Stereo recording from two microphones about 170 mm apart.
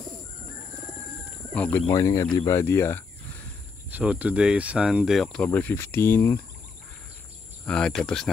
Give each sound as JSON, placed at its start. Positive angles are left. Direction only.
{"t": 1.5, "sound": "speech", "side_deg": 10}
{"t": 1.9, "sound": "speech", "side_deg": 20}
{"t": 3.9, "sound": "speech", "side_deg": -10}
{"t": 7.6, "sound": "speech", "side_deg": 5}